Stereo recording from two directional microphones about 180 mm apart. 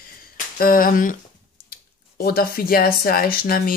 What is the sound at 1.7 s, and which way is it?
Speech, 55° left (ahead or behind).